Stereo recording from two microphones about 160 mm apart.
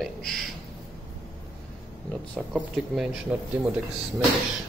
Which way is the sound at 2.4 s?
5° right (ahead or behind).